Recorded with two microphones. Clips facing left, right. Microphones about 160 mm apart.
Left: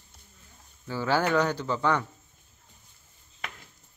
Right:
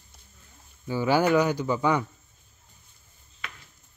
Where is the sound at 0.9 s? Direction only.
15° right (ahead or behind).